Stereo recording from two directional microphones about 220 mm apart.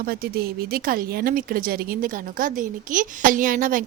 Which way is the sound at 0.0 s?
45° right (ahead or behind).